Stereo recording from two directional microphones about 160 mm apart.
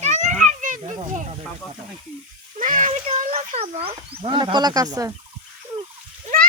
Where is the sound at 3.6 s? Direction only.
35° right (ahead or behind).